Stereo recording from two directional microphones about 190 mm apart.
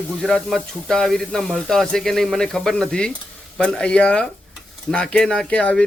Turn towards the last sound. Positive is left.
turn(degrees=5)  # may be behind; listen again after turning